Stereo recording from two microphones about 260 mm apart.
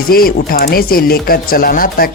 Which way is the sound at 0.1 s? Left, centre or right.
Left.